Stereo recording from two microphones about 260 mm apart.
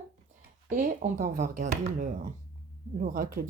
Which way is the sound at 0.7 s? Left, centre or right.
Right.